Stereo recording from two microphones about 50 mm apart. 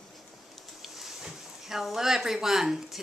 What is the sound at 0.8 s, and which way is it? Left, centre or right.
A woman's voice, centre.